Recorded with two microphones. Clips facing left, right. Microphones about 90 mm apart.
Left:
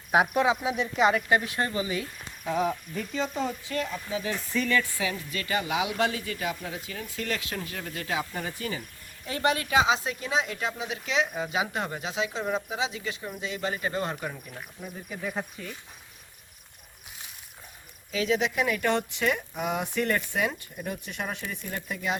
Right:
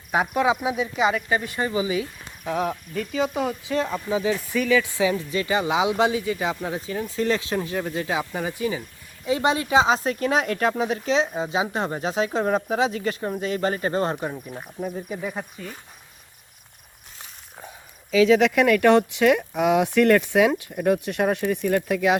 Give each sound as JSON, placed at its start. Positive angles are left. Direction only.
{"t": 0.1, "sound": "speech", "side_deg": 10}
{"t": 0.4, "sound": "speech", "side_deg": -20}
{"t": 0.8, "sound": "speech", "side_deg": 0}
{"t": 4.9, "sound": "speech", "side_deg": -25}
{"t": 6.7, "sound": "speech", "side_deg": -30}
{"t": 9.8, "sound": "speech", "side_deg": -45}
{"t": 15.2, "sound": "speech", "side_deg": -5}
{"t": 18.1, "sound": "speech", "side_deg": -90}